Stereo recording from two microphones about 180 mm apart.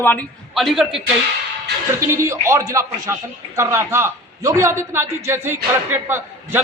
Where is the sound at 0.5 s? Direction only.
Centre (ahead or behind).